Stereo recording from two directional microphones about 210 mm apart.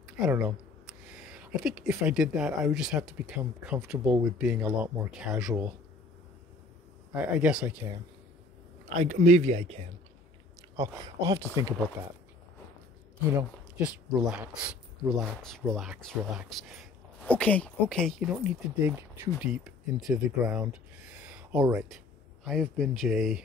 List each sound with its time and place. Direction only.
0.0 s a sound: 5° right (ahead or behind)
0.8 s speech: 5° right (ahead or behind)
7.2 s speech: 5° right (ahead or behind)
9.0 s a man's voice: 35° right (ahead or behind)
10.8 s speech: 15° right (ahead or behind)
13.3 s speech: 10° right (ahead or behind)
18.3 s speech: 5° right (ahead or behind)